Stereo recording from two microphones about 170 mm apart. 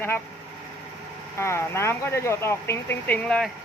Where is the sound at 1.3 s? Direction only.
15° left (ahead or behind).